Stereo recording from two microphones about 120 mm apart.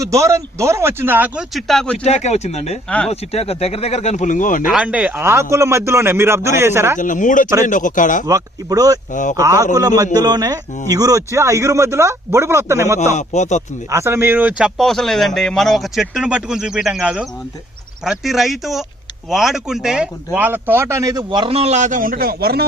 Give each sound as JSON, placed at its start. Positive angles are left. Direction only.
{"t": 0.0, "sound": "a man's voice", "side_deg": -25}
{"t": 1.4, "sound": "speech", "side_deg": 0}
{"t": 2.0, "sound": "speech", "side_deg": 70}
{"t": 4.6, "sound": "a man's voice", "side_deg": -10}
{"t": 7.0, "sound": "speech", "side_deg": 90}
{"t": 8.3, "sound": "a man's voice", "side_deg": -30}
{"t": 13.1, "sound": "speech", "side_deg": 80}
{"t": 13.9, "sound": "a man's voice", "side_deg": -20}
{"t": 14.8, "sound": "speech", "side_deg": 0}
{"t": 21.2, "sound": "a man's voice", "side_deg": -45}